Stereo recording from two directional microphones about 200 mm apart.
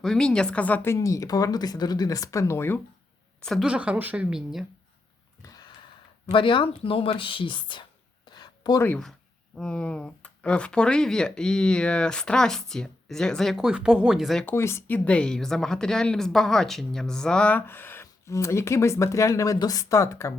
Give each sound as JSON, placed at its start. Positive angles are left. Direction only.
{"t": 0.0, "sound": "speech", "side_deg": 5}
{"t": 3.4, "sound": "speech", "side_deg": 0}
{"t": 5.4, "sound": "sniff", "side_deg": 20}
{"t": 6.3, "sound": "speech", "side_deg": 25}